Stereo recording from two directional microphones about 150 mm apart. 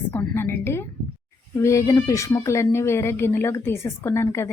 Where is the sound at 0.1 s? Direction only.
15° left (ahead or behind).